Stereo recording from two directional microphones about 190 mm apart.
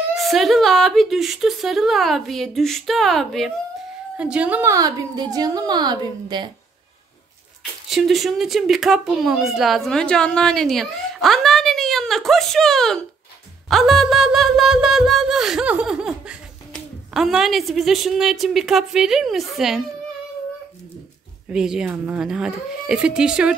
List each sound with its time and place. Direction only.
0.1 s a woman's voice: centre (ahead or behind); by 6.5 s 25° right (ahead or behind)
7.9 s speech: centre (ahead or behind)
13.7 s a sound: centre (ahead or behind)
21.5 s speech: 5° right (ahead or behind)